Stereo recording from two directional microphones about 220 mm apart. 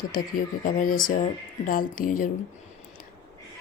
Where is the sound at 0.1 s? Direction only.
40° left (ahead or behind).